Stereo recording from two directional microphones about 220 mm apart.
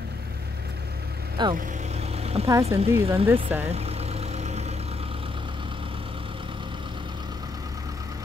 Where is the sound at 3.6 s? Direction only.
30° right (ahead or behind).